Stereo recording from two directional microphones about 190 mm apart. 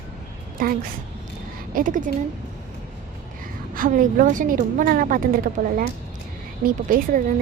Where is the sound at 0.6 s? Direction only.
45° right (ahead or behind).